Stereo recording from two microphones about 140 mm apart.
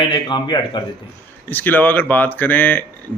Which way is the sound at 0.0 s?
35° left (ahead or behind).